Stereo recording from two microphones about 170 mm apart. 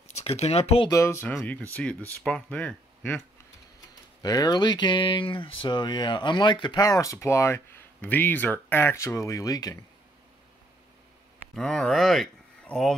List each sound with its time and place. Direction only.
0.2 s speech: 35° left (ahead or behind)
0.8 s speech: 15° left (ahead or behind)
4.2 s speech: 20° left (ahead or behind)
11.5 s speech: 5° left (ahead or behind)